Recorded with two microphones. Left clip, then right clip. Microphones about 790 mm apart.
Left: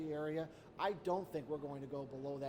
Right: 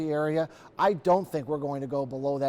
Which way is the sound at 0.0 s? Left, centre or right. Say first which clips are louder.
Right 14 dB; right.